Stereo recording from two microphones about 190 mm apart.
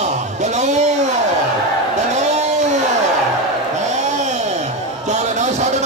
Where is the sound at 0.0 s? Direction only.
40° right (ahead or behind).